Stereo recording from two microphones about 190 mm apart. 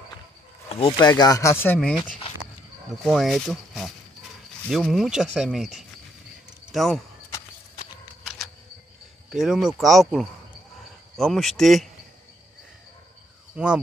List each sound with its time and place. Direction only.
0.7 s speech: 30° left (ahead or behind); by 7.0 s centre (ahead or behind)
8.2 s a sound: centre (ahead or behind)
9.3 s speech: centre (ahead or behind)